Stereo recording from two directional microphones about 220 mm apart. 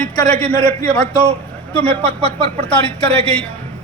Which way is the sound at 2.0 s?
30° right (ahead or behind).